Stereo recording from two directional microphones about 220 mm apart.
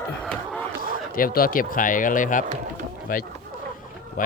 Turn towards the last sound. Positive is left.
turn(degrees=40)  # may be behind; listen again after turning